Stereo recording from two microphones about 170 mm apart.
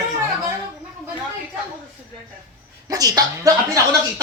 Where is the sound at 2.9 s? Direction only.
20° right (ahead or behind).